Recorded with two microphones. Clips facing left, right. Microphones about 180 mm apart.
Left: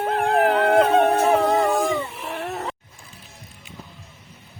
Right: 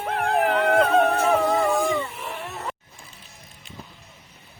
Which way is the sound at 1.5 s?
Centre (ahead or behind).